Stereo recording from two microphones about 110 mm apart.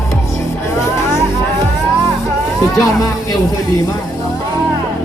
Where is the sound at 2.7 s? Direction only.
30° left (ahead or behind).